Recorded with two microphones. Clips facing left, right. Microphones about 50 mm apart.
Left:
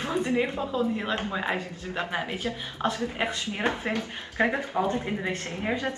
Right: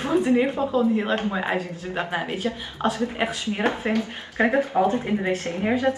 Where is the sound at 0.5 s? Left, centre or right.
Centre.